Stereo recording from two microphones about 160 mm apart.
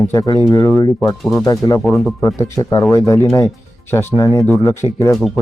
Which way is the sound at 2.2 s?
15° left (ahead or behind).